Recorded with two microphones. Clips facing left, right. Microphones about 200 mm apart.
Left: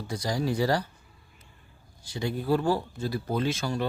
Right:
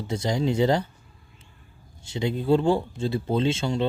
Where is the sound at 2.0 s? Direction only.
25° right (ahead or behind).